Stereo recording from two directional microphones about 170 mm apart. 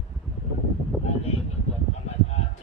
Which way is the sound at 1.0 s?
35° left (ahead or behind).